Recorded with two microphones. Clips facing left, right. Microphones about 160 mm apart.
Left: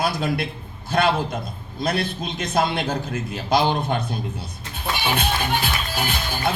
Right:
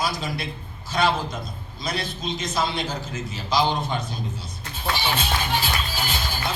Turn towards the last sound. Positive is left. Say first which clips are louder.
# left 3 dB
turn(degrees=55)  # may be behind; listen again after turning